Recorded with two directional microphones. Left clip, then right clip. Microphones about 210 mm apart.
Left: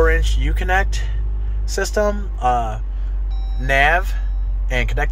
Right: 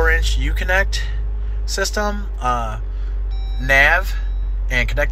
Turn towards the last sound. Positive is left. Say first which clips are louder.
# right 3 dB
turn(degrees=15)  # may be behind; listen again after turning